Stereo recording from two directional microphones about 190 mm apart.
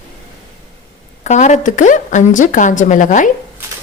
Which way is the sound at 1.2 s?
40° left (ahead or behind).